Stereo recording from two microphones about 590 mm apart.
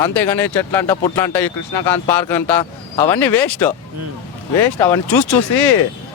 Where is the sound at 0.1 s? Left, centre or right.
Centre.